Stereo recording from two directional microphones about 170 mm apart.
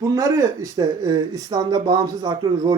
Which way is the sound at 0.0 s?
20° right (ahead or behind).